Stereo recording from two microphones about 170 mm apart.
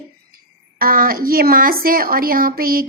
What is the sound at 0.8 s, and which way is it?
A woman's voice, 60° right (ahead or behind).